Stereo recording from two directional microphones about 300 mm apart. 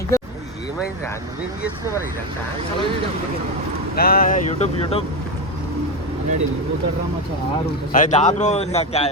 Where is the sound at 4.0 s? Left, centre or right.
Left.